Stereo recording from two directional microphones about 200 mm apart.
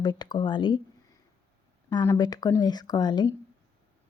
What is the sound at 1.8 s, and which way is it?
Speech, 15° left (ahead or behind).